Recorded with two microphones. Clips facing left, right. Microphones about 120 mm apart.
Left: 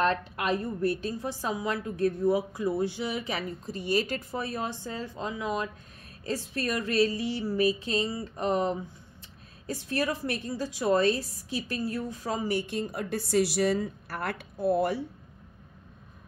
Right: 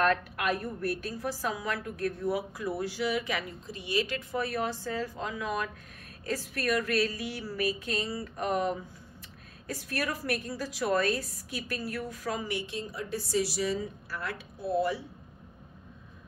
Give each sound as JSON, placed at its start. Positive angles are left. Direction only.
{"t": 0.0, "sound": "a woman's voice", "side_deg": 25}
{"t": 4.4, "sound": "a woman's voice", "side_deg": 25}
{"t": 12.4, "sound": "a woman's voice", "side_deg": 45}